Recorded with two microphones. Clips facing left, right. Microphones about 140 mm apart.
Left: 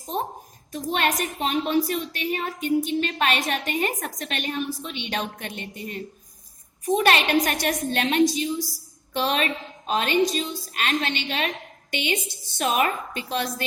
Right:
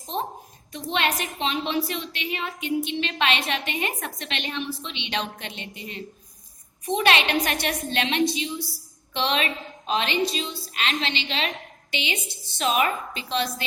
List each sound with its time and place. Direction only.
0.9 s a woman's voice: 45° left (ahead or behind)